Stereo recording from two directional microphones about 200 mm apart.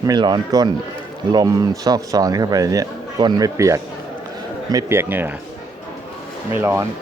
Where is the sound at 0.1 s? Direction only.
20° right (ahead or behind).